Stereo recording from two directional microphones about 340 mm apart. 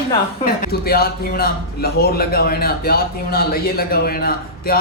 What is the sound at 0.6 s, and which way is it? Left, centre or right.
A man's voice, left.